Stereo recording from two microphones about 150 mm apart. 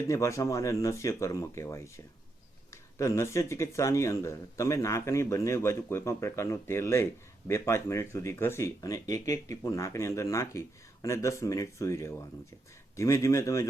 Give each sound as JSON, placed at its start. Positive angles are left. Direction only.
{"t": 0.1, "sound": "speech", "side_deg": 20}